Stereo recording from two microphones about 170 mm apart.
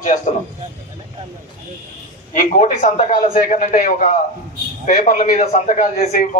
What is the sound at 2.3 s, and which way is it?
A man's voice, 45° left (ahead or behind).